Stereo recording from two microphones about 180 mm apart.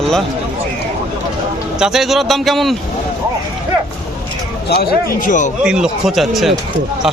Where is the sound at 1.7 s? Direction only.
5° right (ahead or behind).